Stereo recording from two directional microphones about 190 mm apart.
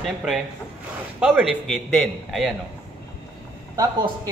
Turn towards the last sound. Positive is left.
turn(degrees=-20)  # may be behind; listen again after turning